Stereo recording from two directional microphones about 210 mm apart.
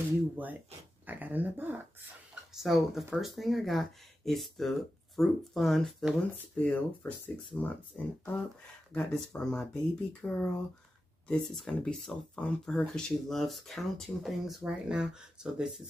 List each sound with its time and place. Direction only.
1.0 s dog: 10° right (ahead or behind)
2.5 s speech: centre (ahead or behind)